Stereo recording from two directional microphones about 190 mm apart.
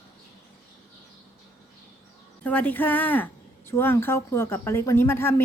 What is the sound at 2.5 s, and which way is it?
Speech, 10° left (ahead or behind).